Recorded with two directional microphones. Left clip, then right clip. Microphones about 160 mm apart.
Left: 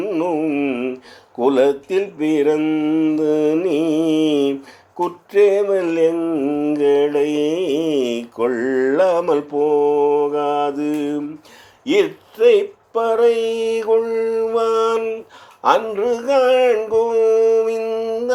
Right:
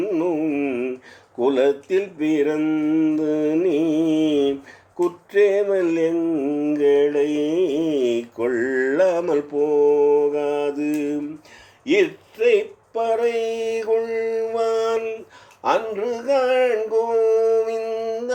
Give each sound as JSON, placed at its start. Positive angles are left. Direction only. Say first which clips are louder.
{"t": 0.0, "sound": "music", "louder": "left 2 dB", "side_deg": 25}
{"t": 1.4, "sound": "mantra", "louder": "left 3 dB", "side_deg": 25}
{"t": 11.9, "sound": "speech", "louder": "left 2 dB", "side_deg": 30}
{"t": 15.6, "sound": "a sound", "louder": "left 5 dB", "side_deg": 35}